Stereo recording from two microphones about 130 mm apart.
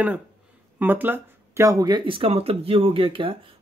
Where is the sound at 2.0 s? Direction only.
45° right (ahead or behind).